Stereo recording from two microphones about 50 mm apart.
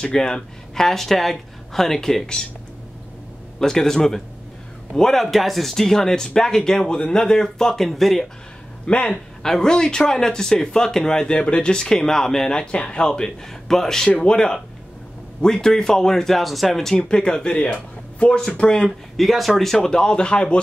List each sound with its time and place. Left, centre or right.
0.0 s speech: centre
3.5 s speech: centre
8.8 s speech: left
9.1 s speech: centre
16.9 s speech: centre
19.1 s speech: centre